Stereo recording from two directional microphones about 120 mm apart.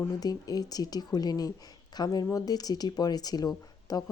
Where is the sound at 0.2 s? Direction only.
30° left (ahead or behind).